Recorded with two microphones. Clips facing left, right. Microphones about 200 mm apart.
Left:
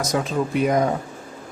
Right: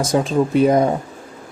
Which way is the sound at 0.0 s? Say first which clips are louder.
Right 5 dB; 30° right (ahead or behind).